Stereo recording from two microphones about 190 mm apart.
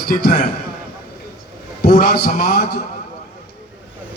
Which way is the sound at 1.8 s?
55° left (ahead or behind).